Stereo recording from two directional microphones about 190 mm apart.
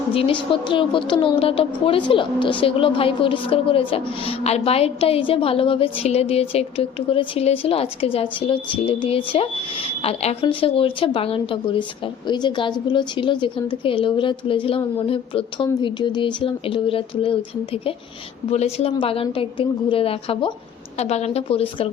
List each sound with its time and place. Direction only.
0.1 s a woman's voice: 30° left (ahead or behind)